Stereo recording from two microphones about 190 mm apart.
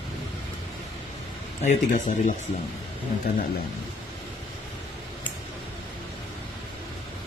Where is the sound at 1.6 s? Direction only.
40° left (ahead or behind).